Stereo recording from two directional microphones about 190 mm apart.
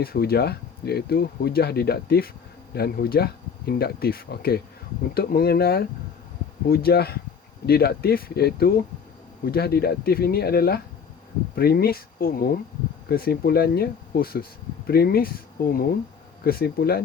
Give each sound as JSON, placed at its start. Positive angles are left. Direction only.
{"t": 0.0, "sound": "speech", "side_deg": 55}